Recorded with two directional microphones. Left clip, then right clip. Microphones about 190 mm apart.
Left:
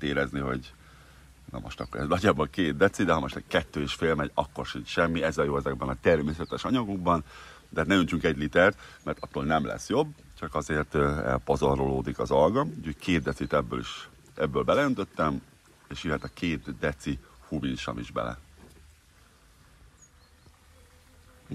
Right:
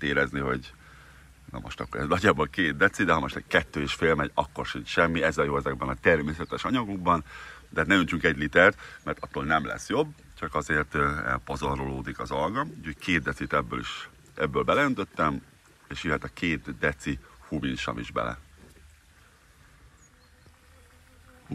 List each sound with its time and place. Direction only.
0.0 s speech: 15° left (ahead or behind)